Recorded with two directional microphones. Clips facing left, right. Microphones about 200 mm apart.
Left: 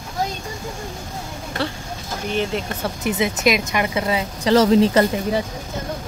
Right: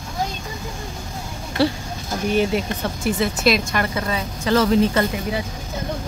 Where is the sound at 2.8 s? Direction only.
20° left (ahead or behind).